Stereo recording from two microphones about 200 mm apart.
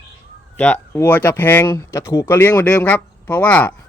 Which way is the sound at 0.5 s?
5° left (ahead or behind).